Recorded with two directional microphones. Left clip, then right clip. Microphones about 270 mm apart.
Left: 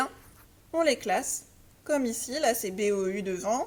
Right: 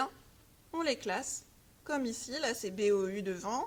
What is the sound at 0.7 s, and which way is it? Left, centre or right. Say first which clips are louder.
A woman's voice: left 8 dB; right.